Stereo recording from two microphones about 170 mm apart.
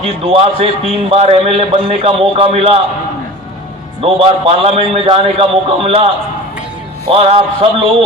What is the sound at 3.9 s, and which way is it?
A man's voice, 35° right (ahead or behind).